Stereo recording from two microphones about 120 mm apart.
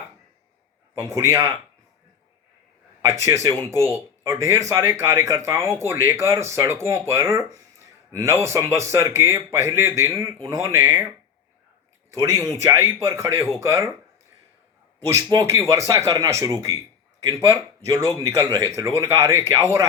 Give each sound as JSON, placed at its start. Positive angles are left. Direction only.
{"t": 0.9, "sound": "speech", "side_deg": -25}
{"t": 3.2, "sound": "speech", "side_deg": -25}
{"t": 12.5, "sound": "speech", "side_deg": -25}
{"t": 15.0, "sound": "speech", "side_deg": -30}
{"t": 18.3, "sound": "speech", "side_deg": 20}
{"t": 18.8, "sound": "speech", "side_deg": -20}